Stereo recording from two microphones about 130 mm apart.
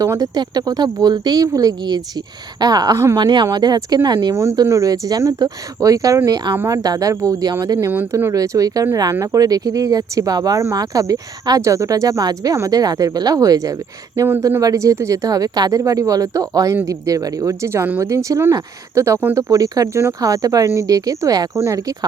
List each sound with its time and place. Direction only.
0.0 s speech: 30° right (ahead or behind)
4.4 s speech: 20° right (ahead or behind)
14.6 s speech: 25° right (ahead or behind)